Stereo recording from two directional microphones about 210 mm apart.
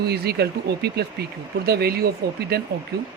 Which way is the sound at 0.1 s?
50° right (ahead or behind).